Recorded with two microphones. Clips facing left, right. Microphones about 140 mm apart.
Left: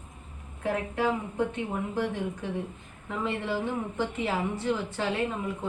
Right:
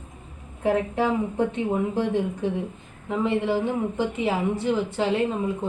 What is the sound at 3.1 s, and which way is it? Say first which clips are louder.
A woman's voice: right 7 dB; 20° right (ahead or behind).